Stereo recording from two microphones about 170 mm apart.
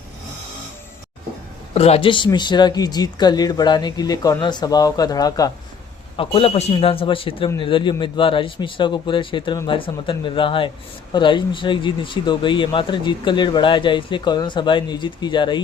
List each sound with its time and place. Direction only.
1.7 s speech: 35° left (ahead or behind)
6.1 s a man's voice: 35° left (ahead or behind)